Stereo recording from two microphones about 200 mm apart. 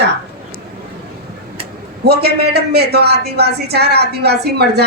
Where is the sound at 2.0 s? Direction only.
50° right (ahead or behind).